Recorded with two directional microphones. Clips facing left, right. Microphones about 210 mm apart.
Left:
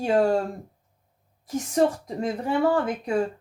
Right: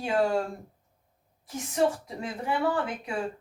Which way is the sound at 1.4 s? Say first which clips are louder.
Left 4 dB; 40° left (ahead or behind).